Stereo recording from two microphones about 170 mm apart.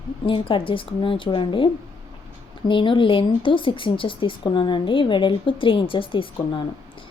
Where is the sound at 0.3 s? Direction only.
30° left (ahead or behind).